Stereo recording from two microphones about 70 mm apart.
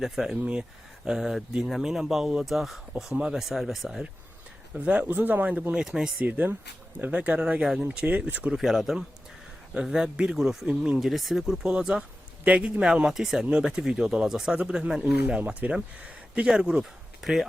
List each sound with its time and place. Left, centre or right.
0.0 s speech: centre
3.5 s speech: centre
4.7 s speech: centre
5.0 s speech: right
5.7 s speech: centre
6.1 s speech: right
8.5 s speech: centre
10.7 s speech: centre
11.0 s speech: centre